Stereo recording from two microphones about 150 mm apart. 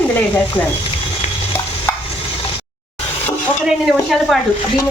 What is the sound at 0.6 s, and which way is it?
Speech, 10° left (ahead or behind).